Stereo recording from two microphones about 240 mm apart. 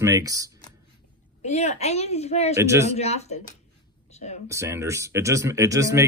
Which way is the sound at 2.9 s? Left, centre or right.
Left.